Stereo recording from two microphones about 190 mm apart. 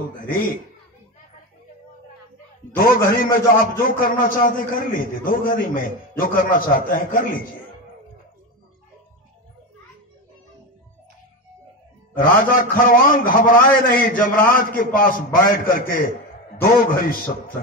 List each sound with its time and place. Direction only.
0.3 s a man's voice: 45° left (ahead or behind)
3.3 s a man's voice: 50° left (ahead or behind)
12.2 s a man's voice: 50° left (ahead or behind)